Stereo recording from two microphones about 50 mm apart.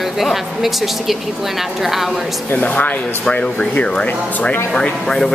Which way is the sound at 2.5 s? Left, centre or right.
Left.